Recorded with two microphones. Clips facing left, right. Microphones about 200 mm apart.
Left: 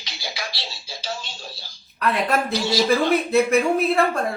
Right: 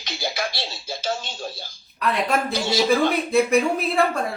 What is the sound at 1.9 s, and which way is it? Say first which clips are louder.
A man's voice: left 1 dB; centre (ahead or behind).